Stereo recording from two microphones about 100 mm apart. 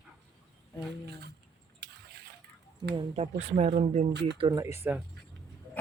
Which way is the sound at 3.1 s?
90° right.